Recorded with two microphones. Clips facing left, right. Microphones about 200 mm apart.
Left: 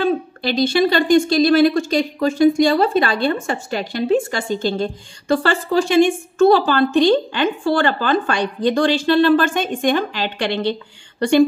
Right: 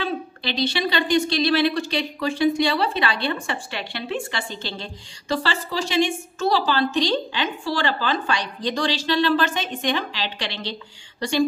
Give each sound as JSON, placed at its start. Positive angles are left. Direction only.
{"t": 0.0, "sound": "a woman's voice", "side_deg": 50}